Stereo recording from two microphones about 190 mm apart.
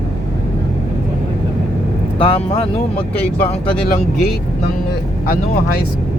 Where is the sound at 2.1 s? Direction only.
30° left (ahead or behind).